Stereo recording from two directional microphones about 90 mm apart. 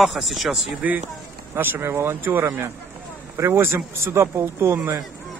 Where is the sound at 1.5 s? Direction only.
25° right (ahead or behind).